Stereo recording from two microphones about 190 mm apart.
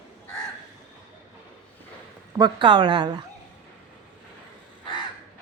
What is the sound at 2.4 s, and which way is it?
Speech, 25° right (ahead or behind).